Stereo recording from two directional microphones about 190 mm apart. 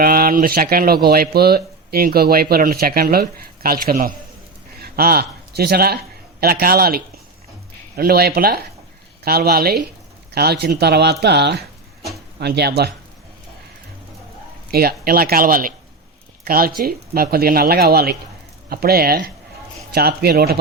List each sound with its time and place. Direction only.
0.0 s speech: 50° right (ahead or behind)
14.7 s speech: 55° right (ahead or behind)